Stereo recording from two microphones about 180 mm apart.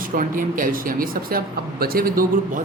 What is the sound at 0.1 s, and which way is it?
Speech, 50° right (ahead or behind).